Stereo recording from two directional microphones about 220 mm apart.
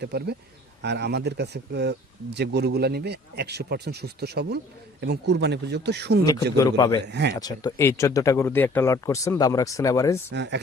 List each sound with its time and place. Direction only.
0.0 s speech: 50° right (ahead or behind)
6.2 s speech: 15° left (ahead or behind)
7.0 s speech: 50° right (ahead or behind)
7.3 s speech: 15° left (ahead or behind)
10.3 s speech: 50° right (ahead or behind)